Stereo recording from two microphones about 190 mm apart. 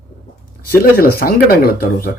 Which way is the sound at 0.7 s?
50° left (ahead or behind).